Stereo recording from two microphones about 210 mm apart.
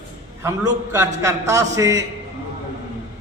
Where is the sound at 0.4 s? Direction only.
15° right (ahead or behind).